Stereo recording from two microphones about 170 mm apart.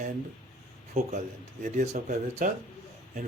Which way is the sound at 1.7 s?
40° right (ahead or behind).